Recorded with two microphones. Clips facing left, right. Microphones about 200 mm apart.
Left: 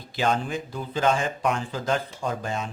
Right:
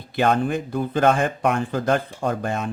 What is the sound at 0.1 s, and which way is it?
Speech, 55° right (ahead or behind).